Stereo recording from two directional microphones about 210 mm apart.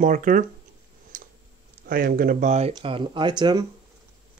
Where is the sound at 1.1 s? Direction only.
40° right (ahead or behind).